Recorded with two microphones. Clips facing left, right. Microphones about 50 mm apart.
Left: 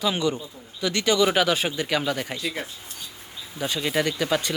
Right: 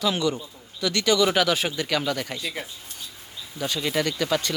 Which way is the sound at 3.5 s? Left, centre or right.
Centre.